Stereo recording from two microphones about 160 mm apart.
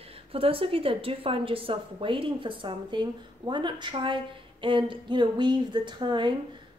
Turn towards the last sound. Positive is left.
turn(degrees=-30)  # may be behind; listen again after turning